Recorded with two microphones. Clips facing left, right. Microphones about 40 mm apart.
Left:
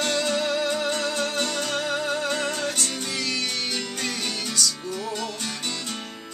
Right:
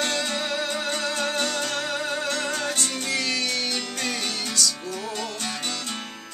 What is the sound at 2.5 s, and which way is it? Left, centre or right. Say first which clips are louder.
Music: even; centre.